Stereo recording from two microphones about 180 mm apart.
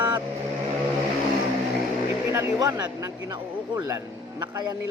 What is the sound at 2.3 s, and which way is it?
Speech, 15° right (ahead or behind).